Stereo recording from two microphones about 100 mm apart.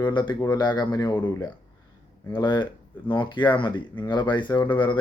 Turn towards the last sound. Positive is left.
turn(degrees=50)  # may be behind; listen again after turning